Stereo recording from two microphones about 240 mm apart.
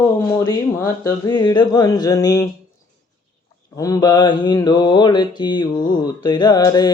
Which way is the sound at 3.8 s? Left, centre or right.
Centre.